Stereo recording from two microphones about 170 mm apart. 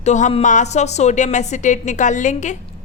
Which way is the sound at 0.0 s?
45° left (ahead or behind).